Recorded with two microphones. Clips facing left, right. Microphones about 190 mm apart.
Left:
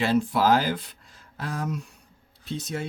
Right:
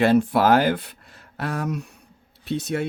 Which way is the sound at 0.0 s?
60° right (ahead or behind).